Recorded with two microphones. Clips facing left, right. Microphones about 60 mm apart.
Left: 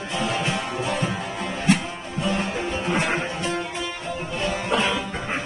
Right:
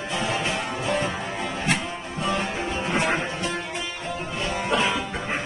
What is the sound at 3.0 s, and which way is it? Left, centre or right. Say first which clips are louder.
Music: right 3 dB; right.